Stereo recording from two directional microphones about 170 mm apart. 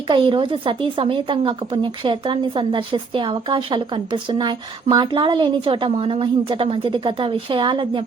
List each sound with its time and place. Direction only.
0.1 s a woman's voice: 30° right (ahead or behind)